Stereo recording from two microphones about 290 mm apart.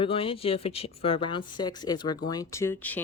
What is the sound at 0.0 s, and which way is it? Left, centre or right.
Speech, centre.